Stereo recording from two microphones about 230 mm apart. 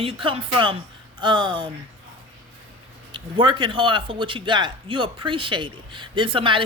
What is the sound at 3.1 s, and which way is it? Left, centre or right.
A man's voice, right.